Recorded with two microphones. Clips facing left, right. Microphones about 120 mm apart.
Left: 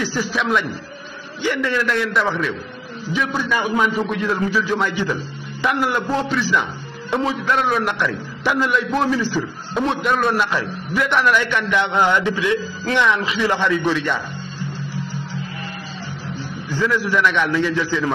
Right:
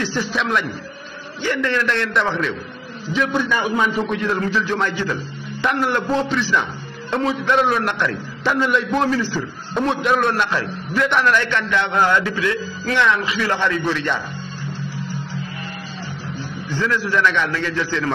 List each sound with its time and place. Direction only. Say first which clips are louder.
0.0 s a man's voice: even; 5° left (ahead or behind)
1.4 s a man's voice: even; 10° left (ahead or behind)
9.1 s a man's voice: left 1 dB; 15° left (ahead or behind)
9.8 s a man's voice: right 1 dB; centre (ahead or behind)
16.6 s a man's voice: left 2 dB; 10° left (ahead or behind)